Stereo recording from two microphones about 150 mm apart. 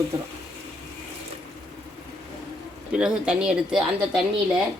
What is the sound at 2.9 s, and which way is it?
A woman's voice, 5° right (ahead or behind).